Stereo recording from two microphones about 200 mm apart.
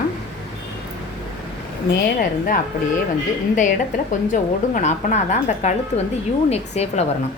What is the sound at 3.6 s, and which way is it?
A woman's voice, 40° left (ahead or behind).